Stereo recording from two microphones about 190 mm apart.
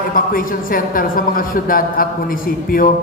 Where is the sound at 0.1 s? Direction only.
50° left (ahead or behind).